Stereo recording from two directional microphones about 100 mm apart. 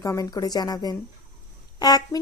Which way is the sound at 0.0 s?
35° left (ahead or behind).